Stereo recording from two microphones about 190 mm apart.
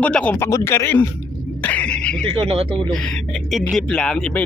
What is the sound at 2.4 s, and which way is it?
Speech, 30° right (ahead or behind).